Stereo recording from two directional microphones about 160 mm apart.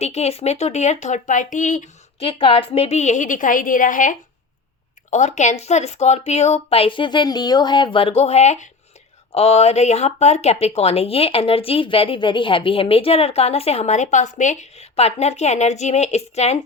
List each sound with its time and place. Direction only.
0.0 s speech: 40° left (ahead or behind)
2.2 s speech: 35° left (ahead or behind)